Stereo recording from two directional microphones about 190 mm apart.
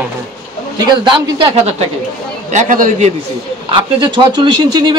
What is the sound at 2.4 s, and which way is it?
Speech, 40° right (ahead or behind).